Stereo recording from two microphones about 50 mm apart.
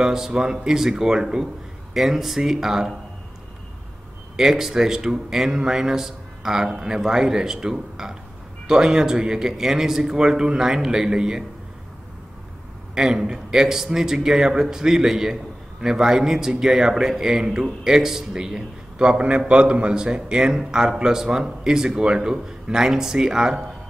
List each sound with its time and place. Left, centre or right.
0.0 s a man's voice: centre
4.4 s a man's voice: centre
12.9 s a man's voice: centre